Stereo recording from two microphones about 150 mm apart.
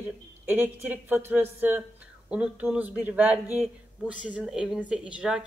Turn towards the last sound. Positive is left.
turn(degrees=-5)  # may be behind; listen again after turning